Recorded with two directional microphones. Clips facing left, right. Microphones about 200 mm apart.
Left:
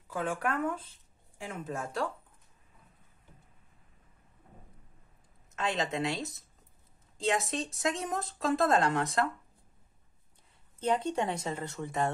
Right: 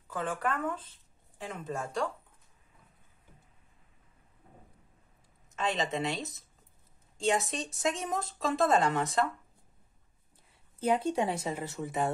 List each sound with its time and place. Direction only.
0.1 s speech: 10° left (ahead or behind)
5.6 s speech: centre (ahead or behind)
10.8 s speech: 10° right (ahead or behind)